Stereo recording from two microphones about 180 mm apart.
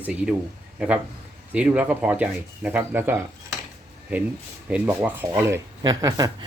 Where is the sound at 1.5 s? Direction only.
5° right (ahead or behind).